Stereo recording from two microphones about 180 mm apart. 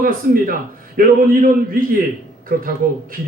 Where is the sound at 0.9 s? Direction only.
50° right (ahead or behind).